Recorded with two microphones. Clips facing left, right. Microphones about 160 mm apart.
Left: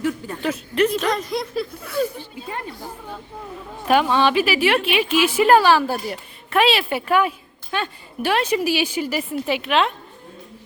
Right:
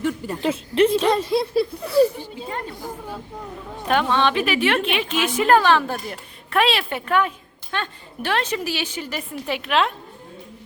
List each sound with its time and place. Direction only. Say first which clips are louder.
0.4 s speech: right 2 dB; 25° right (ahead or behind)
3.8 s a woman's voice: left 2 dB; 10° left (ahead or behind)